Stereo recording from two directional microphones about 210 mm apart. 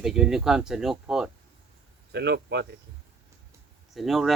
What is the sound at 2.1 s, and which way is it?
Speech, 50° right (ahead or behind).